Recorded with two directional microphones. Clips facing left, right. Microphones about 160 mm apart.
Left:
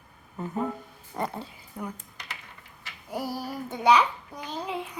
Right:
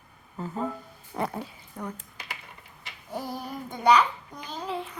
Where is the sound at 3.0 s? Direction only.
10° left (ahead or behind).